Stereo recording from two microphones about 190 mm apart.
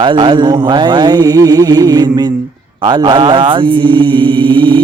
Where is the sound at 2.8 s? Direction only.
25° right (ahead or behind).